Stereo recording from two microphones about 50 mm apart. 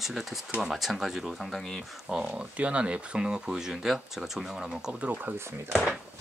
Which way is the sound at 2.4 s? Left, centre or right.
Right.